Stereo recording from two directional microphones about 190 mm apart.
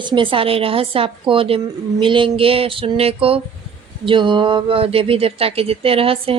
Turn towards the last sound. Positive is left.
turn(degrees=-30)  # may be behind; listen again after turning